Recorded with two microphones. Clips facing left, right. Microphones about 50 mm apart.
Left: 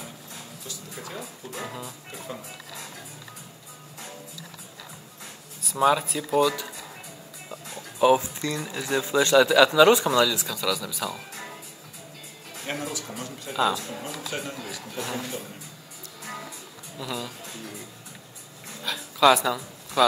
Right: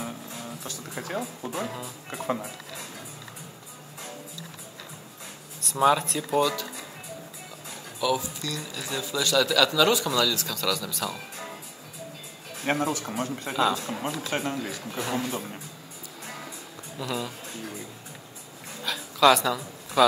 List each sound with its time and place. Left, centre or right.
0.7 s music: right
5.6 s speech: centre
8.0 s a man's voice: left; by 11.1 s centre
12.6 s speech: right
15.0 s speech: right
17.0 s speech: centre
18.8 s a sound: centre